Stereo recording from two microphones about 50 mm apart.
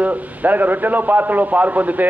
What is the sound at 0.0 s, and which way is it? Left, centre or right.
A man's voice, right.